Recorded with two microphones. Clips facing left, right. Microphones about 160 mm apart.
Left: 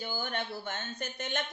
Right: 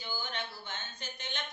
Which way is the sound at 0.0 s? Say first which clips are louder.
Left 4 dB; 50° left (ahead or behind).